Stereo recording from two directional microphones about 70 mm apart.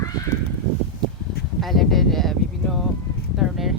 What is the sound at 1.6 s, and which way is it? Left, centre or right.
Speech, centre.